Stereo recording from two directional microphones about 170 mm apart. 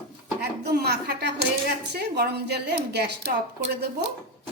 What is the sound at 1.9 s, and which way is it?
Speech, 75° right (ahead or behind).